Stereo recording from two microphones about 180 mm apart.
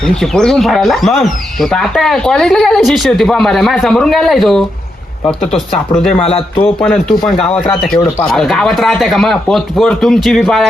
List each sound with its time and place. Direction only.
0.2 s speech: 5° left (ahead or behind)
6.0 s speech: 5° left (ahead or behind)
7.9 s speech: 20° left (ahead or behind)
8.3 s speech: centre (ahead or behind)